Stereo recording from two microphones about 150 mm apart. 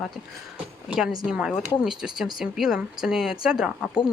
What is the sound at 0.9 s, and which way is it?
Speech, 5° right (ahead or behind).